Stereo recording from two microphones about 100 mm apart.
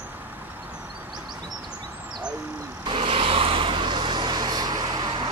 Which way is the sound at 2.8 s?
60° right (ahead or behind).